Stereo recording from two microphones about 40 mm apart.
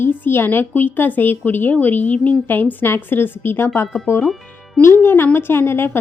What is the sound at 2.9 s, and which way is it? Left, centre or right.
Speech, left.